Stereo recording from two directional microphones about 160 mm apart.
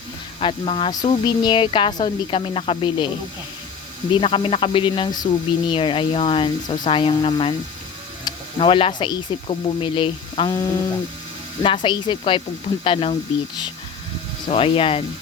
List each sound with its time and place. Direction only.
0.3 s speech: 35° left (ahead or behind)
4.1 s speech: 35° left (ahead or behind)
8.2 s a sound: 35° left (ahead or behind)
9.0 s speech: 30° left (ahead or behind)
11.6 s speech: 30° left (ahead or behind)
14.4 s speech: 35° left (ahead or behind)